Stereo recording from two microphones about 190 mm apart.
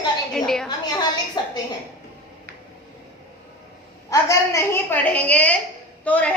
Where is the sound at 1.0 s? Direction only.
20° left (ahead or behind).